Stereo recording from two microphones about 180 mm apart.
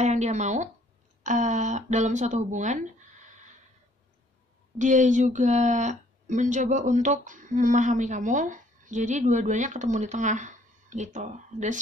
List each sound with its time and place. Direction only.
0.0 s speech: 40° right (ahead or behind)
4.7 s speech: 45° right (ahead or behind)